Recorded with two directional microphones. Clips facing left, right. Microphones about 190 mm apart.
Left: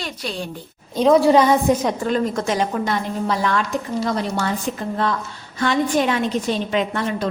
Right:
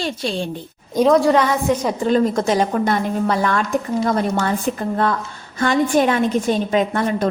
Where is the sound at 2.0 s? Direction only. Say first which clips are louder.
Right 7 dB; 30° right (ahead or behind).